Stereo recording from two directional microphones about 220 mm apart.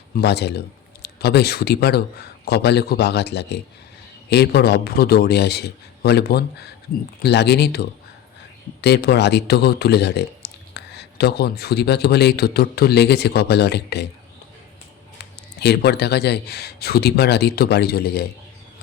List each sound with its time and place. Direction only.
0.1 s speech: 50° left (ahead or behind)
15.2 s speech: 50° left (ahead or behind)